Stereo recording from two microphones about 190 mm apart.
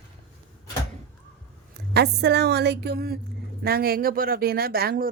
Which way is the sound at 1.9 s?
60° right (ahead or behind).